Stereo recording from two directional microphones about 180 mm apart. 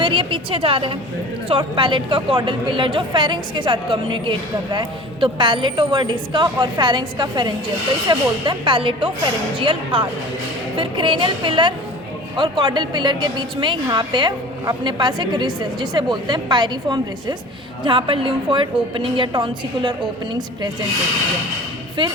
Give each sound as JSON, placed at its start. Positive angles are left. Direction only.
{"t": 0.0, "sound": "a woman's voice", "side_deg": -30}